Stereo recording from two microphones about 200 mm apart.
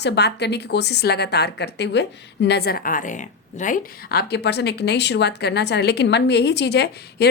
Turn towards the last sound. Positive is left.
turn(degrees=55)  # may be behind; listen again after turning